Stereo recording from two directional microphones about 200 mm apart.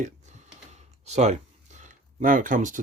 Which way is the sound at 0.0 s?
35° right (ahead or behind).